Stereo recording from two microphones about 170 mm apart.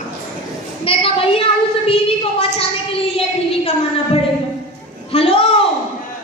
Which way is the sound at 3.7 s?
35° left (ahead or behind).